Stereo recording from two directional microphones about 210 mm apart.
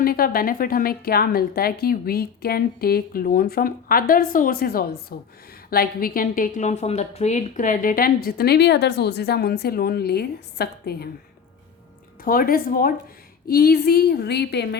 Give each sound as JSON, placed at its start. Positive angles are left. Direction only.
{"t": 0.0, "sound": "a woman's voice", "side_deg": 45}
{"t": 12.2, "sound": "a woman's voice", "side_deg": 45}